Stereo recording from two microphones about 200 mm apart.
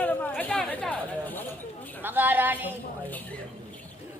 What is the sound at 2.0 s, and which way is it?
Speech, 10° right (ahead or behind).